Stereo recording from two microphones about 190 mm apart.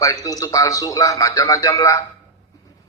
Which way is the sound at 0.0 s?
20° left (ahead or behind).